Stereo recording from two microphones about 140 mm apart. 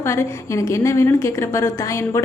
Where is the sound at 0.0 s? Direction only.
20° left (ahead or behind).